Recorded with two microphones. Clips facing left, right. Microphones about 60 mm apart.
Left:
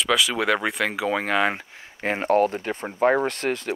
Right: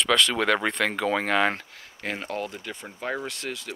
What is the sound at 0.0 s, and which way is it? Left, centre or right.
Speech, centre.